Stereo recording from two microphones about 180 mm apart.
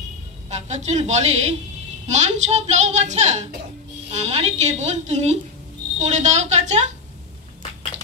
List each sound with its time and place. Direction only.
0.5 s speech: 40° right (ahead or behind)